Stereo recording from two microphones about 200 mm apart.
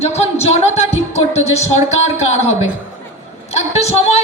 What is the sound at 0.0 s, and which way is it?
Speech, 30° left (ahead or behind).